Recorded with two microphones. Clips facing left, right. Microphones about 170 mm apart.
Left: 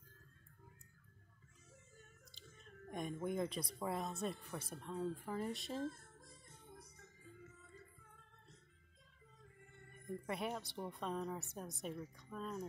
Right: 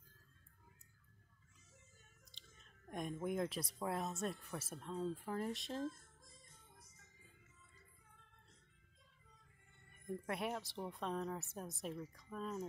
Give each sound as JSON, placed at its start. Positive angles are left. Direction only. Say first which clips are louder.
{"t": 2.3, "sound": "chewing", "louder": "left 8 dB", "side_deg": 5}
{"t": 2.9, "sound": "a woman's voice", "louder": "even", "side_deg": 0}
{"t": 5.9, "sound": "music", "louder": "even", "side_deg": 60}
{"t": 10.2, "sound": "a woman's voice", "louder": "even", "side_deg": 0}